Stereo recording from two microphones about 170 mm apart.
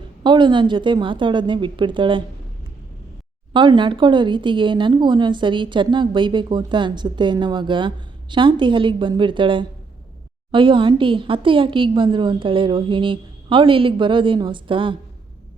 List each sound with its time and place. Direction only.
0.2 s speech: 30° right (ahead or behind)
3.5 s speech: 30° right (ahead or behind)